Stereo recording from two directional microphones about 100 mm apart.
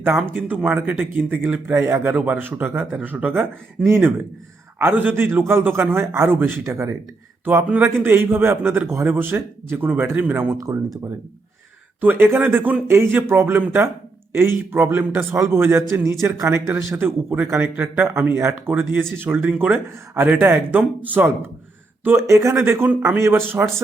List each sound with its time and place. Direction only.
0.3 s a man's voice: 15° right (ahead or behind)
11.9 s a man's voice: 20° right (ahead or behind)